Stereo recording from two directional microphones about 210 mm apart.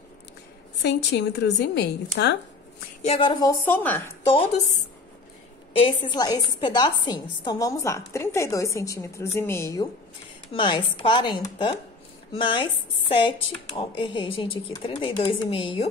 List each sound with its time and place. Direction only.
0.8 s a woman's voice: 55° left (ahead or behind)
3.0 s a woman's voice: 25° left (ahead or behind); by 4.0 s 10° left (ahead or behind)
4.3 s speech: 25° left (ahead or behind)
5.8 s a woman's voice: 25° left (ahead or behind)
13.7 s speech: 25° left (ahead or behind)